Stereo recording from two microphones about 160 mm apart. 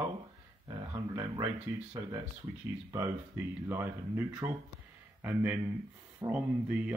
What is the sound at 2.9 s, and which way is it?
Speech, 15° right (ahead or behind).